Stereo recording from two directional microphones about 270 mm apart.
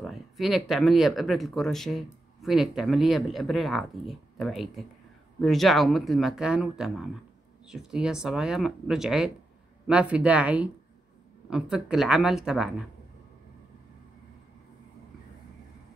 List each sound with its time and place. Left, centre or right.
0.0 s speech: centre